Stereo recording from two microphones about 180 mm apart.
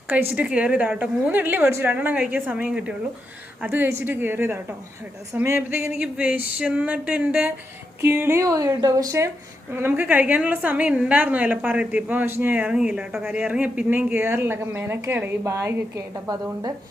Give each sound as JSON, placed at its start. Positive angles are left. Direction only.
{"t": 0.1, "sound": "a woman's voice", "side_deg": -10}